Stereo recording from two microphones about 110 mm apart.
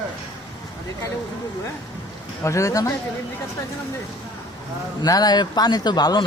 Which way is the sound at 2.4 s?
30° left (ahead or behind).